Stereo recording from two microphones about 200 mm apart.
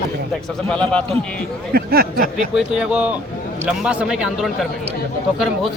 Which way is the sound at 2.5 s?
5° right (ahead or behind).